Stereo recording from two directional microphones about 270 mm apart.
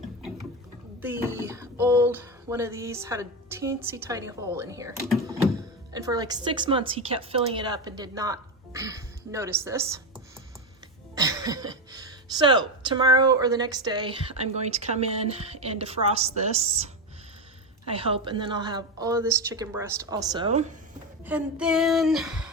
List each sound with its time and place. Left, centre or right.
1.0 s a woman's voice: centre
11.1 s a woman's voice: centre
17.9 s a woman's voice: centre
21.2 s speech: centre